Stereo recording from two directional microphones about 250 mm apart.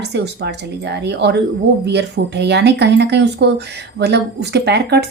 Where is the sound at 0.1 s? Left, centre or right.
Right.